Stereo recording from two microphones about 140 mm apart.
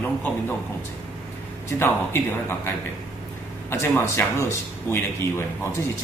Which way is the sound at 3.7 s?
15° left (ahead or behind).